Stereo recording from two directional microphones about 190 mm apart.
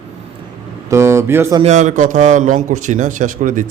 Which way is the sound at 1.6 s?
40° right (ahead or behind).